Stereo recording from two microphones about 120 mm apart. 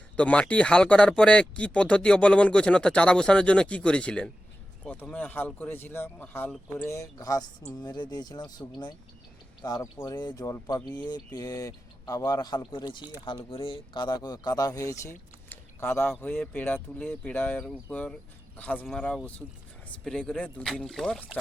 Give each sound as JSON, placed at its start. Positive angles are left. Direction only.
{"t": 0.2, "sound": "speech", "side_deg": 10}
{"t": 6.8, "sound": "speech", "side_deg": 25}
{"t": 9.6, "sound": "speech", "side_deg": 35}
{"t": 10.8, "sound": "speech", "side_deg": 10}
{"t": 11.3, "sound": "speech", "side_deg": 30}